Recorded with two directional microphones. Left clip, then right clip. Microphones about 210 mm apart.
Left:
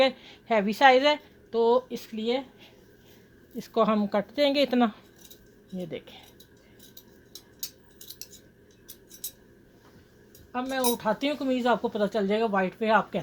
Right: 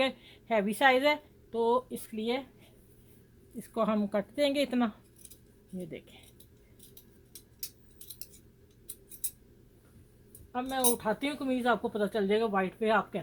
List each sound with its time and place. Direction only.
0.0 s a woman's voice: 15° left (ahead or behind)
10.5 s speech: 15° left (ahead or behind)